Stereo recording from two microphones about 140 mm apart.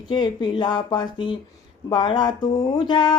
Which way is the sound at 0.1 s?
30° left (ahead or behind).